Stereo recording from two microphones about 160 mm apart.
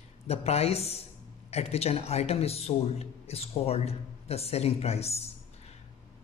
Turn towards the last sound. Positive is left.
turn(degrees=40)  # may be behind; listen again after turning